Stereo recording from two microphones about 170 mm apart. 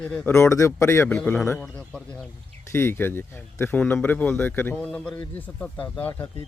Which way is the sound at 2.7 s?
15° left (ahead or behind).